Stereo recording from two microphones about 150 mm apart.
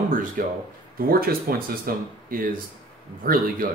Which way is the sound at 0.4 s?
70° right (ahead or behind).